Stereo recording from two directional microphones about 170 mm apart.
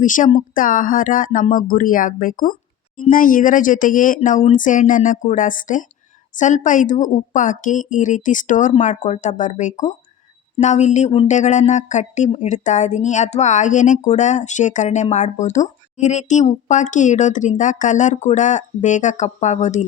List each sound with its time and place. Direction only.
0.0 s a woman's voice: 50° left (ahead or behind)